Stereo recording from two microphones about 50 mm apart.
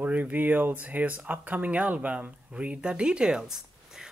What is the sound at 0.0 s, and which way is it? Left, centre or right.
Speech, right.